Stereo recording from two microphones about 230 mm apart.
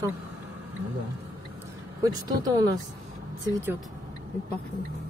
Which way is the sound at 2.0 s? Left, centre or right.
Centre.